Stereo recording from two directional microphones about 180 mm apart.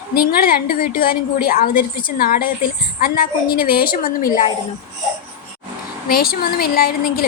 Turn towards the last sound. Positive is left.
turn(degrees=55)  # may be behind; listen again after turning